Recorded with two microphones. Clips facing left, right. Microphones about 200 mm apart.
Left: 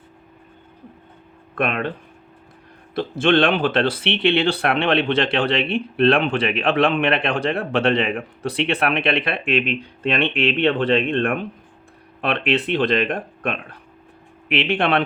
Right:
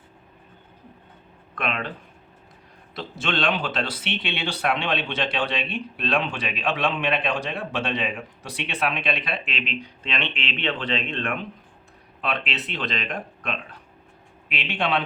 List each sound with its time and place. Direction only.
1.5 s speech: 55° left (ahead or behind)
2.9 s speech: 55° left (ahead or behind)